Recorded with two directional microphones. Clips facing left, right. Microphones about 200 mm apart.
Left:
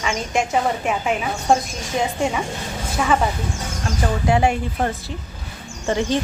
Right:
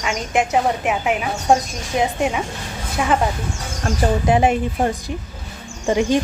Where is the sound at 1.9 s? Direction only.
15° right (ahead or behind).